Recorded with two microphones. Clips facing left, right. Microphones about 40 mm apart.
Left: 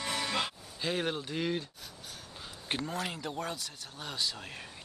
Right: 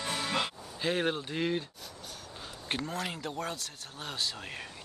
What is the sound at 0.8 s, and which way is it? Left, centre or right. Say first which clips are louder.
Speech: right 3 dB; centre.